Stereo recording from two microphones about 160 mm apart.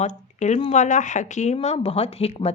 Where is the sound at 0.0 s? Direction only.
45° left (ahead or behind).